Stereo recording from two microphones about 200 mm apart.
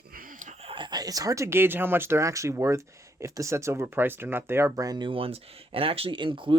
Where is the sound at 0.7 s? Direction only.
25° right (ahead or behind).